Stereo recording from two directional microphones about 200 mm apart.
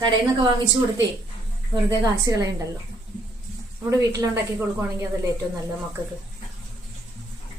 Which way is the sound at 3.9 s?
15° right (ahead or behind).